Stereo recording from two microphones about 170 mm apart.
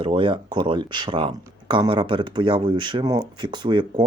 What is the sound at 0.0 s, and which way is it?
Speech, 30° right (ahead or behind).